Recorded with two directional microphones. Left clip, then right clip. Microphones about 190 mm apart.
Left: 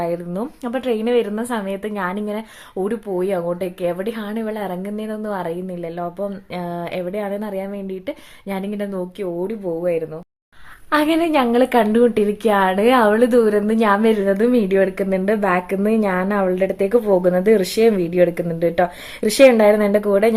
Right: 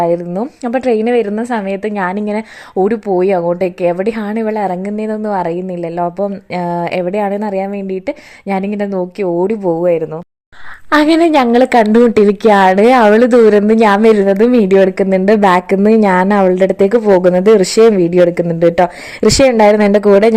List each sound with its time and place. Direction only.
0.0 s a woman's voice: 30° right (ahead or behind)
2.8 s speech: 30° right (ahead or behind)